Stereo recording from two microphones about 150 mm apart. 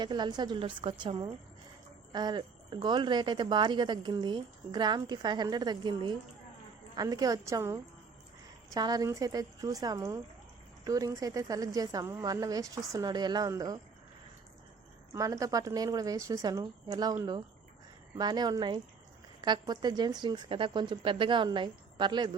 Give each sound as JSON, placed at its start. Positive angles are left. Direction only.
{"t": 0.0, "sound": "a woman's voice", "side_deg": -30}
{"t": 15.1, "sound": "speech", "side_deg": -20}
{"t": 18.2, "sound": "a woman's voice", "side_deg": -25}